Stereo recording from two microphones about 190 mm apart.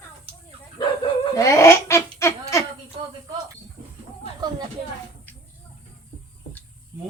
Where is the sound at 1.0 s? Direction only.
15° left (ahead or behind).